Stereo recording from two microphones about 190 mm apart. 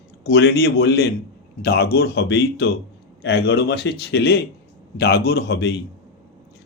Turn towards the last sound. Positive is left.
turn(degrees=60)  # may be behind; listen again after turning